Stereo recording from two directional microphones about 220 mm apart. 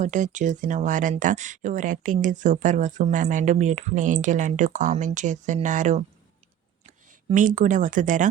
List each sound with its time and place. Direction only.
0.0 s speech: 35° right (ahead or behind)
7.1 s speech: 35° right (ahead or behind)